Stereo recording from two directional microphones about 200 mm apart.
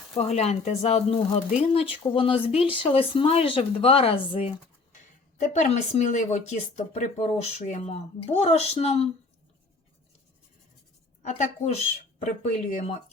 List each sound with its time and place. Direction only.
0.2 s speech: 30° left (ahead or behind)
11.2 s speech: 35° left (ahead or behind)